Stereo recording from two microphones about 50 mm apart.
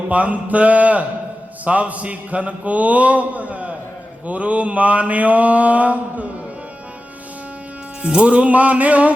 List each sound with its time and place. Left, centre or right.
0.1 s a man's voice: right
8.0 s a man's voice: right